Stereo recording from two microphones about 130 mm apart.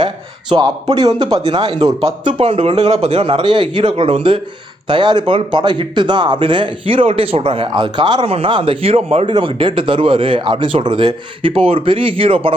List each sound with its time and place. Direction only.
0.5 s a man's voice: 30° right (ahead or behind)